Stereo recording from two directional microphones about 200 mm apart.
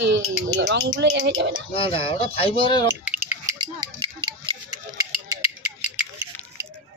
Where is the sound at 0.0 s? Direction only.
70° right (ahead or behind).